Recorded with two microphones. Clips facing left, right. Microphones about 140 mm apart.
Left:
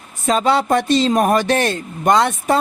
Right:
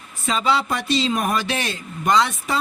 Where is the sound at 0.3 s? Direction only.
50° left (ahead or behind).